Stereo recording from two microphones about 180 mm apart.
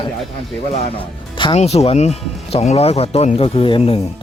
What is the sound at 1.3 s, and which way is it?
Speech, 30° left (ahead or behind).